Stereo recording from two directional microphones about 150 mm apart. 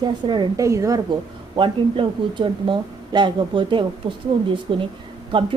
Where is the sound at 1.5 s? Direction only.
35° right (ahead or behind).